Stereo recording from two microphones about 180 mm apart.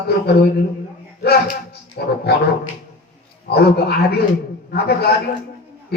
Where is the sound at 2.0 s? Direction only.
60° left (ahead or behind).